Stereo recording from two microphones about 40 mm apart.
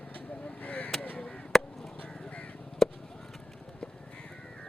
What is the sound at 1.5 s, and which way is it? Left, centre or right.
Chop, centre.